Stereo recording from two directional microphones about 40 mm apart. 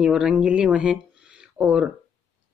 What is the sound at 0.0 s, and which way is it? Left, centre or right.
Speech, right.